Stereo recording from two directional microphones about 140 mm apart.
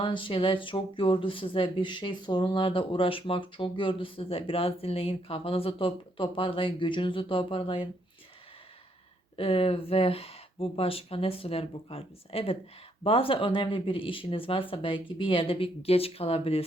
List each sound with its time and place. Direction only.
0.0 s speech: 35° left (ahead or behind)
9.3 s speech: 40° left (ahead or behind)